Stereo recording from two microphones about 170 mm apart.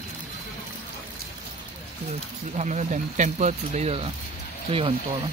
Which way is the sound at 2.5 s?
45° right (ahead or behind).